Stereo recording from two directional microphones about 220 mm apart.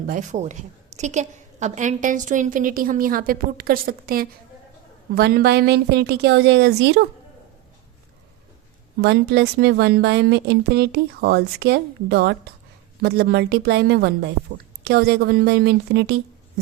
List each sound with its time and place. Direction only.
0.1 s a woman's voice: 35° right (ahead or behind); by 7.0 s 50° right (ahead or behind)
9.0 s speech: 50° right (ahead or behind)